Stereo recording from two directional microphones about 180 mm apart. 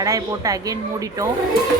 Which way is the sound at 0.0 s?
20° right (ahead or behind).